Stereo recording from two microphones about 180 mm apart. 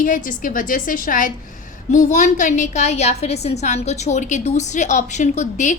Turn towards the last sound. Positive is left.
turn(degrees=40)  # may be behind; listen again after turning